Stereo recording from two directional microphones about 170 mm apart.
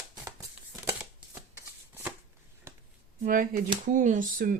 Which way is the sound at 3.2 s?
55° right (ahead or behind).